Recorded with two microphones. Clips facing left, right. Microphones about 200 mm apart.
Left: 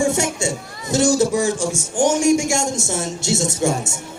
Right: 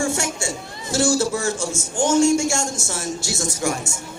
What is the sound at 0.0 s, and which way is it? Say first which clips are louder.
A man's voice: left 4 dB; 20° left (ahead or behind).